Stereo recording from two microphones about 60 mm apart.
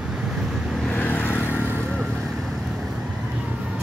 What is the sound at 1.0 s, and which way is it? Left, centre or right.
Vehicle, left.